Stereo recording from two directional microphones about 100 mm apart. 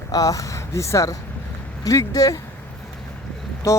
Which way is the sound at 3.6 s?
30° left (ahead or behind).